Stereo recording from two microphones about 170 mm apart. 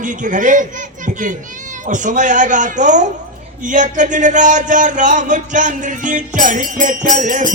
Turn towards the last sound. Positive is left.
turn(degrees=-50)  # may be behind; listen again after turning